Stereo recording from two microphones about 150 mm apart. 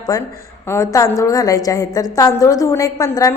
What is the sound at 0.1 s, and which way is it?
A woman's voice, 25° left (ahead or behind).